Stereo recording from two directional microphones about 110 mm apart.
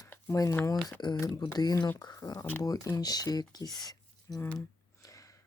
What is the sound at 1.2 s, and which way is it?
Speech, 35° left (ahead or behind).